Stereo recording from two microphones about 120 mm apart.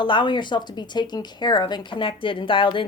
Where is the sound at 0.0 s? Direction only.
45° left (ahead or behind).